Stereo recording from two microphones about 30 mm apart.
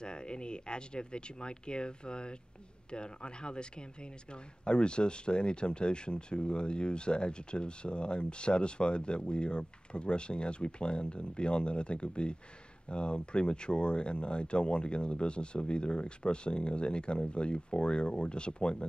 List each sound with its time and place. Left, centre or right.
0.0 s speech: left